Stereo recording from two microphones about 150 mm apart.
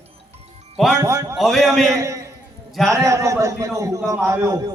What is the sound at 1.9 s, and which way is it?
A man's voice, 20° right (ahead or behind).